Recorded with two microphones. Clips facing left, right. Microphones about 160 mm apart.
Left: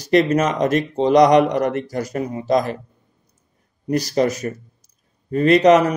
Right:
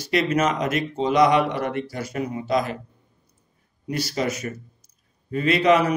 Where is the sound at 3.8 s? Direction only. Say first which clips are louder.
Left 7 dB; 40° left (ahead or behind).